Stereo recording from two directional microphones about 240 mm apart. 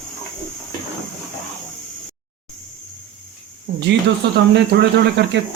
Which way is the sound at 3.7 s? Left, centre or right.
Right.